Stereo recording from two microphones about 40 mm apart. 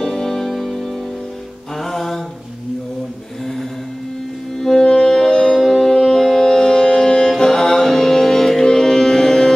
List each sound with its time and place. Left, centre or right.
0.0 s music: centre
1.8 s a sound: centre
4.6 s music: centre